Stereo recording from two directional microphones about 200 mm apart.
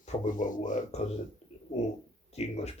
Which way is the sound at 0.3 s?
40° left (ahead or behind).